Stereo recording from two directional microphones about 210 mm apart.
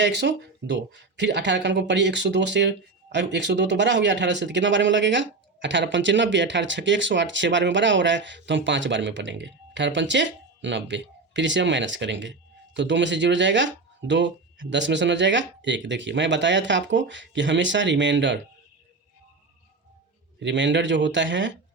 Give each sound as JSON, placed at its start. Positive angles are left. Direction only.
{"t": 0.0, "sound": "speech", "side_deg": -55}
{"t": 20.4, "sound": "speech", "side_deg": -60}